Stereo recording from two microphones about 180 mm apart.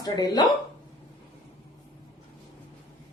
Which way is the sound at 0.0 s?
20° left (ahead or behind).